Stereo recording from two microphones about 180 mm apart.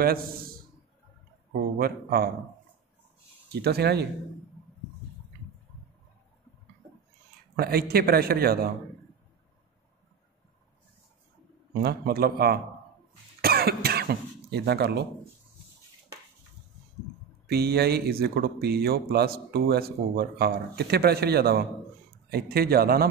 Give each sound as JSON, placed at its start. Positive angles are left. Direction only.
{"t": 0.0, "sound": "speech", "side_deg": -55}
{"t": 1.8, "sound": "speech", "side_deg": -55}
{"t": 3.6, "sound": "speech", "side_deg": -65}
{"t": 7.5, "sound": "speech", "side_deg": -60}
{"t": 11.8, "sound": "speech", "side_deg": -60}
{"t": 13.4, "sound": "cough", "side_deg": -60}
{"t": 17.5, "sound": "speech", "side_deg": -60}